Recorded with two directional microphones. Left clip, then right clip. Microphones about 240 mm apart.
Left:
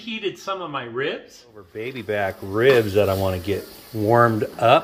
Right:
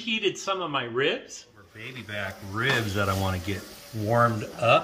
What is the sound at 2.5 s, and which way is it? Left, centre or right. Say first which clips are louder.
Speech: left 10 dB; centre.